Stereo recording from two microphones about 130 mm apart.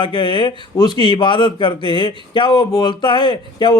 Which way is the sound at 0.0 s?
35° left (ahead or behind).